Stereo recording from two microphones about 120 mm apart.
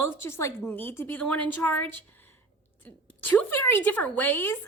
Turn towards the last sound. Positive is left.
turn(degrees=15)  # may be behind; listen again after turning